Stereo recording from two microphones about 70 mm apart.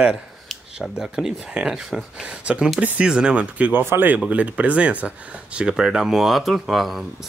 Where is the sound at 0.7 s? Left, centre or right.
Centre.